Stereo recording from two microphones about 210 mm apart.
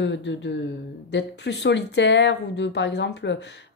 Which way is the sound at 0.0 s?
55° left (ahead or behind).